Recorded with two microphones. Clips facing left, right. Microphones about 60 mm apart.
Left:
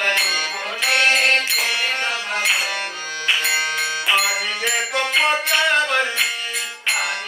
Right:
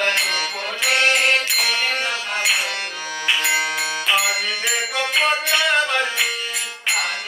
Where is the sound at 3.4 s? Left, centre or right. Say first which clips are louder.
Even; centre.